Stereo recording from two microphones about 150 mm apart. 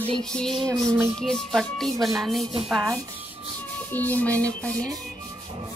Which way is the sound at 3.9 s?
10° left (ahead or behind).